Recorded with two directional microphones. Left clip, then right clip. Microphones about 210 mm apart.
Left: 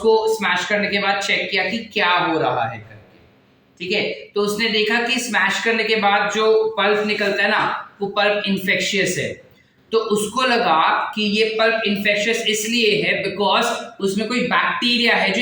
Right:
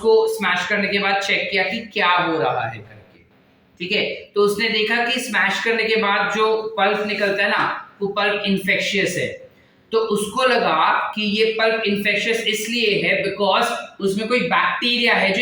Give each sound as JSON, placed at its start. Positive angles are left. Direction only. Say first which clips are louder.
{"t": 0.0, "sound": "a woman's voice", "louder": "even", "side_deg": 5}
{"t": 3.8, "sound": "a woman's voice", "louder": "even", "side_deg": 5}